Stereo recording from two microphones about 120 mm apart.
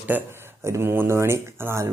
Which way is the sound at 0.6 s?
20° right (ahead or behind).